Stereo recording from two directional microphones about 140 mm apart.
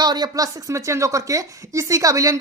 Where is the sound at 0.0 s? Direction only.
30° right (ahead or behind).